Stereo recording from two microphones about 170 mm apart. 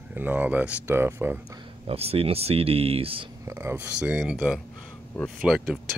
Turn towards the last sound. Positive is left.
turn(degrees=0)  # may be behind; listen again after turning